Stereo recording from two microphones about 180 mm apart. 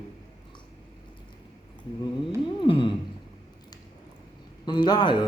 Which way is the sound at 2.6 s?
30° left (ahead or behind).